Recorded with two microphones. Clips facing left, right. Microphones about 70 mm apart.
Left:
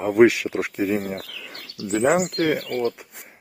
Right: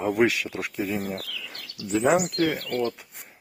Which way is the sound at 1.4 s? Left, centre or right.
Left.